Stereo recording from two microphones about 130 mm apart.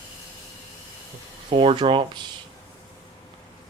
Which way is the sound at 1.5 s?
40° right (ahead or behind).